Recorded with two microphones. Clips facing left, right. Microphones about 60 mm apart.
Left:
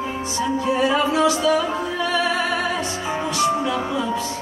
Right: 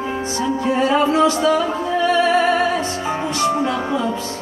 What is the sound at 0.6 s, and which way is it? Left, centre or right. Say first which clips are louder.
Music: right 3 dB; right.